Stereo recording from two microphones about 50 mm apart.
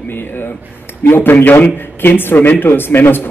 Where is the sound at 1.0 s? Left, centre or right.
Left.